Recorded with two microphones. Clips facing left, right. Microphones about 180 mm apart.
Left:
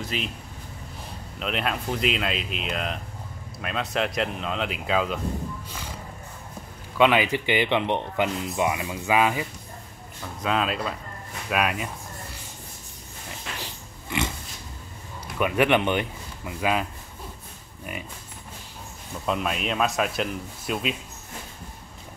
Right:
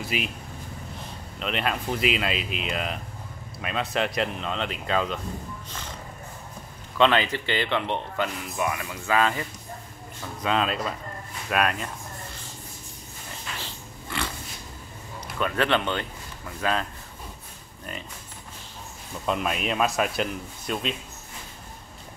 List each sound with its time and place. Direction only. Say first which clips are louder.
0.0 s speech: right 1 dB; 10° right (ahead or behind)
1.4 s a man's voice: even; centre (ahead or behind)
5.7 s music: left 1 dB; 10° left (ahead or behind)
7.0 s a man's voice: left 1 dB; 10° left (ahead or behind)
13.6 s pig: even; 20° left (ahead or behind)
15.3 s speech: left 3 dB; 15° left (ahead or behind)
19.2 s a man's voice: even; centre (ahead or behind)